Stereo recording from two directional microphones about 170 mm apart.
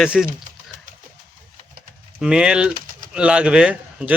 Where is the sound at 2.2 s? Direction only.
5° right (ahead or behind).